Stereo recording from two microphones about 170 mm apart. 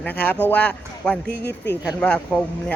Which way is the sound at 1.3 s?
75° left (ahead or behind).